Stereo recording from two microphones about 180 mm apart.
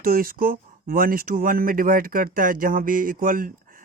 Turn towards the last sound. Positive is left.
turn(degrees=-50)  # may be behind; listen again after turning